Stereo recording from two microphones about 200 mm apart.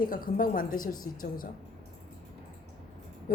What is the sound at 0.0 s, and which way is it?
Speech, 45° left (ahead or behind).